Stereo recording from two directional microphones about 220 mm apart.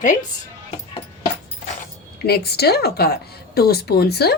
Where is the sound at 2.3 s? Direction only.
45° left (ahead or behind).